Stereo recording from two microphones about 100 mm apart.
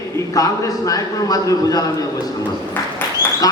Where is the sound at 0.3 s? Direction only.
35° left (ahead or behind).